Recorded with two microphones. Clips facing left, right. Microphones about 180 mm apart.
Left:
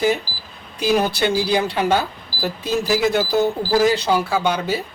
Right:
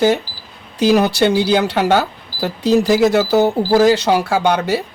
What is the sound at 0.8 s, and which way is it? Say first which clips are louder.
Speech: right 5 dB; 75° right (ahead or behind).